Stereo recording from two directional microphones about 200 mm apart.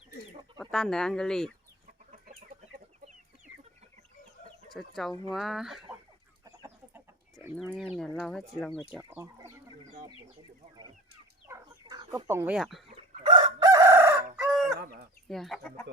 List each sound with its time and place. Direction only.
0.6 s speech: centre (ahead or behind)
4.7 s speech: centre (ahead or behind)
6.4 s chicken: 15° right (ahead or behind)
7.5 s speech: centre (ahead or behind)
8.9 s speech: 10° right (ahead or behind)
11.4 s speech: 15° right (ahead or behind)
13.0 s chicken: 25° right (ahead or behind)
14.3 s chicken: centre (ahead or behind)
15.3 s speech: centre (ahead or behind)